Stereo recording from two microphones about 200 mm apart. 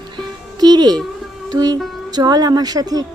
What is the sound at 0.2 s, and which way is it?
Music, 20° right (ahead or behind).